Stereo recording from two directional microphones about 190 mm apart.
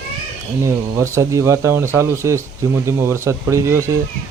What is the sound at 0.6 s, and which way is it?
Speech, 15° right (ahead or behind).